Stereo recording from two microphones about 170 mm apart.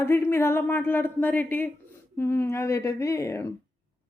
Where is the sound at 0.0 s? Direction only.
15° left (ahead or behind).